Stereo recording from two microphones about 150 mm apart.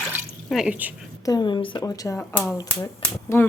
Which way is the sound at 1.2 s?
25° left (ahead or behind).